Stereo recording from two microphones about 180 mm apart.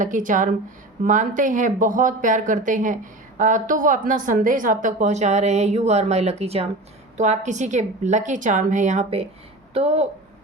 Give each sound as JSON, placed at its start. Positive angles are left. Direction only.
{"t": 0.0, "sound": "a woman's voice", "side_deg": -45}